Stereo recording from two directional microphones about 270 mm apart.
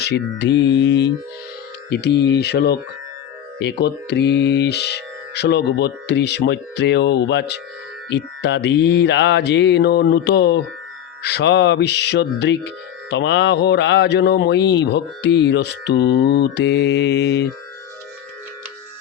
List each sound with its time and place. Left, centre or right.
0.0 s speech: left